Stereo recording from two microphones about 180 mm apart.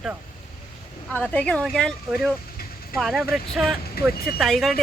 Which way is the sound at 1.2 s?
5° left (ahead or behind).